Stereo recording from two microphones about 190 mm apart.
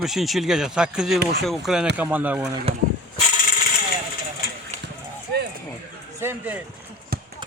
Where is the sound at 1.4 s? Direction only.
Centre (ahead or behind).